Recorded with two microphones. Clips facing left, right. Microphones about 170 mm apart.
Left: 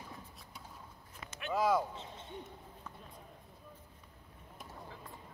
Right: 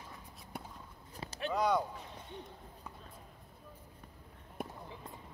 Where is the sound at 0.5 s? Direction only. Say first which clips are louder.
Right 8 dB; 55° right (ahead or behind).